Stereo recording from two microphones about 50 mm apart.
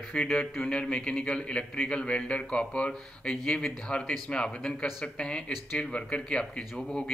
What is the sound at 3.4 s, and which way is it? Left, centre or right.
Speech, centre.